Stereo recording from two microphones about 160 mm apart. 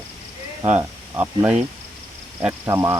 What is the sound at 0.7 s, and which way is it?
Speech, 10° right (ahead or behind).